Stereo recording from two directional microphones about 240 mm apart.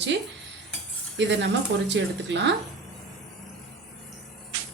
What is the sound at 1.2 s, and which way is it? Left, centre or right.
A woman's voice, right.